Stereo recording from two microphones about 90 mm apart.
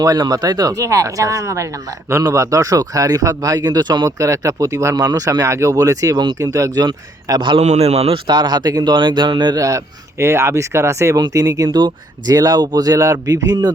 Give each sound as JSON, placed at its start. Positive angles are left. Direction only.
{"t": 0.0, "sound": "speech", "side_deg": -45}
{"t": 9.6, "sound": "speech", "side_deg": -35}